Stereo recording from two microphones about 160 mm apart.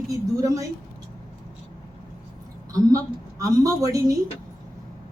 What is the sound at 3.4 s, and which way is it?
Speech, 20° right (ahead or behind).